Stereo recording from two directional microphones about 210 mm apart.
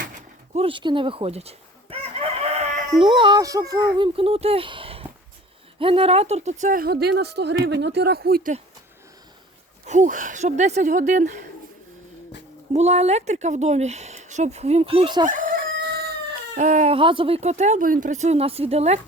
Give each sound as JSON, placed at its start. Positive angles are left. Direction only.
{"t": 0.5, "sound": "chicken", "side_deg": -25}
{"t": 3.0, "sound": "speech", "side_deg": -25}
{"t": 9.8, "sound": "speech", "side_deg": -35}
{"t": 12.7, "sound": "speech", "side_deg": -30}
{"t": 15.3, "sound": "crowing", "side_deg": -40}
{"t": 16.6, "sound": "speech", "side_deg": -35}